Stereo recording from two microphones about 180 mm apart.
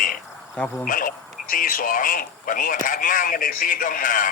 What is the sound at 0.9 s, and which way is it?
Speech, 50° left (ahead or behind).